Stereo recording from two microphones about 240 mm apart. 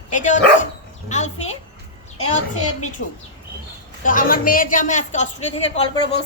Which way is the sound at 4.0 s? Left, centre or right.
Left.